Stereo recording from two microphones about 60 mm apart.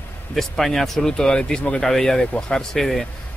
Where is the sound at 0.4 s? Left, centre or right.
Centre.